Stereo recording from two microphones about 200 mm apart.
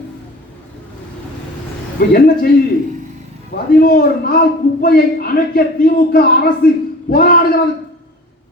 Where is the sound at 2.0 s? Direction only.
45° left (ahead or behind).